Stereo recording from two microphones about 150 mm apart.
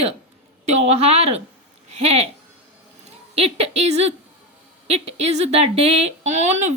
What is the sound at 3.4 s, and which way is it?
Speech, 40° right (ahead or behind).